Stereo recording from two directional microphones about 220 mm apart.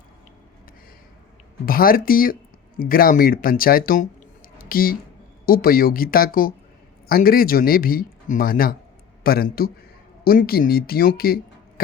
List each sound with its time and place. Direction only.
1.6 s speech: 40° left (ahead or behind)
4.5 s a sound: 40° left (ahead or behind)
5.5 s speech: 40° left (ahead or behind)